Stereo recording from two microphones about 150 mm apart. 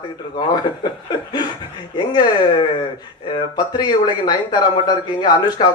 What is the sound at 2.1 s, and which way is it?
Speech, 30° left (ahead or behind).